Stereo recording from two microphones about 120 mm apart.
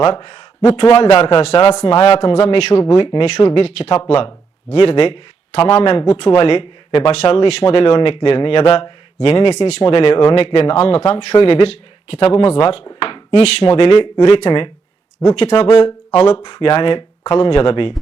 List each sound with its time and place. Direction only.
0.0 s speech: 50° left (ahead or behind)
0.9 s speech: 55° left (ahead or behind); by 16.0 s 40° left (ahead or behind)
16.1 s speech: 55° left (ahead or behind)